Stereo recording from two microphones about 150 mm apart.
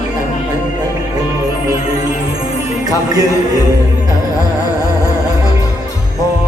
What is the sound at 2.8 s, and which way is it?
Music, 25° right (ahead or behind).